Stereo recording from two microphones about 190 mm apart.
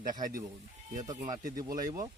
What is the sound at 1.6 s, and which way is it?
Speech, 20° right (ahead or behind).